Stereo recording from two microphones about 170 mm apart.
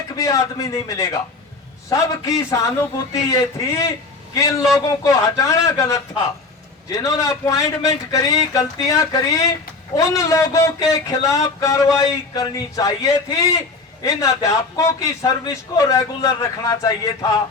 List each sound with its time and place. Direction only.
0.2 s speech: 20° left (ahead or behind)